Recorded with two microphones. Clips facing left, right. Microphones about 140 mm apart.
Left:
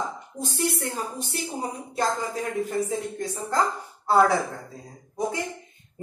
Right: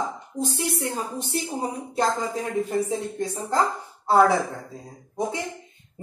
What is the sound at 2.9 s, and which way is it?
Speech, 25° right (ahead or behind).